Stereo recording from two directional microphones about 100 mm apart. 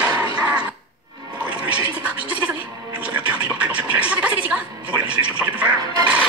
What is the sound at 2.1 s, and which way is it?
Music, 10° right (ahead or behind).